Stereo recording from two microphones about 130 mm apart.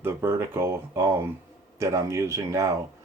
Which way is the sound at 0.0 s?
20° right (ahead or behind).